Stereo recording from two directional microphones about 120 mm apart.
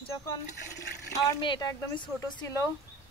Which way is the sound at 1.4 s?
40° left (ahead or behind).